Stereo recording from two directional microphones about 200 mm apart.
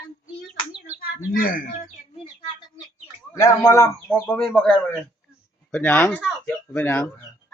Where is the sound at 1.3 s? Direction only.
45° left (ahead or behind).